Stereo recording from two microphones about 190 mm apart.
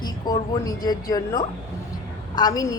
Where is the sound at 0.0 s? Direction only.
20° left (ahead or behind).